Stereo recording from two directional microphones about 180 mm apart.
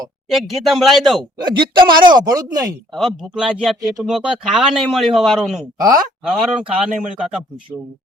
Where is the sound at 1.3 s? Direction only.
25° right (ahead or behind).